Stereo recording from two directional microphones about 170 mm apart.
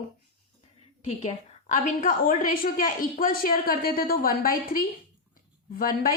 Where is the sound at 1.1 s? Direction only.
45° left (ahead or behind).